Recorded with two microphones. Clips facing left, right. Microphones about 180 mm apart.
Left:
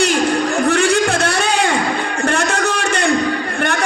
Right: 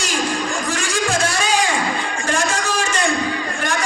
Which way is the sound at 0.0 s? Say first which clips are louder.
Left 7 dB; 60° left (ahead or behind).